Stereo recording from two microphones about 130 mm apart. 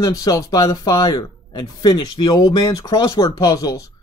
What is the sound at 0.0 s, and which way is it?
Speech, 25° left (ahead or behind).